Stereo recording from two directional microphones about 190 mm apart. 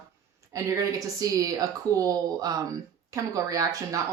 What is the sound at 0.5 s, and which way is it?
Speech, 20° right (ahead or behind).